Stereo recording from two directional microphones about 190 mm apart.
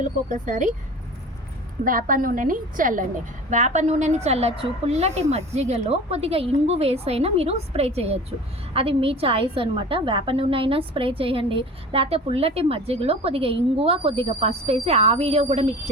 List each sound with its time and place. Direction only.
0.0 s a woman's voice: 40° right (ahead or behind)
1.8 s a woman's voice: 45° right (ahead or behind)